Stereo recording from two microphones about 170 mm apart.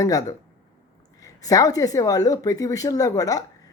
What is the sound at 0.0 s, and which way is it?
Speech, 20° left (ahead or behind).